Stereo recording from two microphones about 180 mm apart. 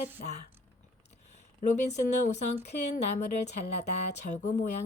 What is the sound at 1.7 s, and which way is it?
Speech, 40° left (ahead or behind).